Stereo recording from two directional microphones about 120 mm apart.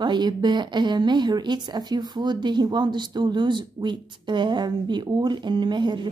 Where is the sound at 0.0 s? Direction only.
40° right (ahead or behind).